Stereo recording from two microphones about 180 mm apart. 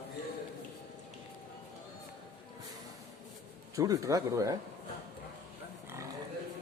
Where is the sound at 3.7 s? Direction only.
20° right (ahead or behind).